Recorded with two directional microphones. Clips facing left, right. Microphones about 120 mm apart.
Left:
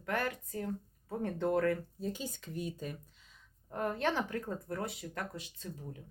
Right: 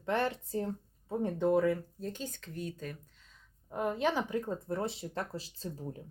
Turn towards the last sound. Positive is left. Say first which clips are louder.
# right 4 dB
turn(degrees=-35)  # may be behind; listen again after turning